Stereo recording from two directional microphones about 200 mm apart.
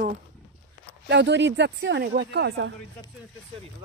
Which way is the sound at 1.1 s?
60° right (ahead or behind).